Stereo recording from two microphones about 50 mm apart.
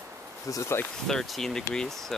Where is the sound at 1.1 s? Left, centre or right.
Centre.